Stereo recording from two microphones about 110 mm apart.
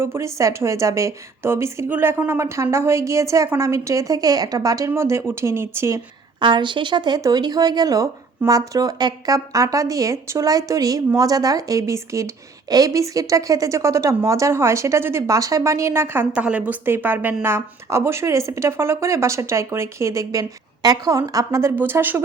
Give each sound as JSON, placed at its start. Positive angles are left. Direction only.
{"t": 0.0, "sound": "speech", "side_deg": -25}
{"t": 6.4, "sound": "a woman's voice", "side_deg": -45}
{"t": 16.3, "sound": "a woman's voice", "side_deg": -10}